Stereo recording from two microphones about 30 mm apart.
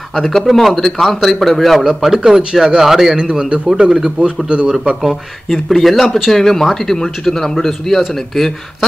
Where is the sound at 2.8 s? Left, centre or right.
Centre.